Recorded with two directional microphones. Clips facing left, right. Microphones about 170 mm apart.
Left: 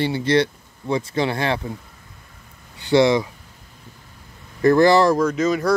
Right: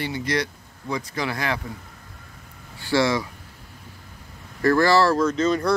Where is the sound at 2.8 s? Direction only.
20° left (ahead or behind).